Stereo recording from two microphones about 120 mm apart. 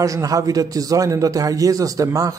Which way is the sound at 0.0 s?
30° right (ahead or behind).